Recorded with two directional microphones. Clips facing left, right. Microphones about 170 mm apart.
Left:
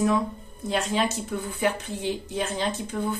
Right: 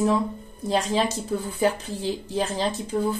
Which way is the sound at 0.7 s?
35° right (ahead or behind).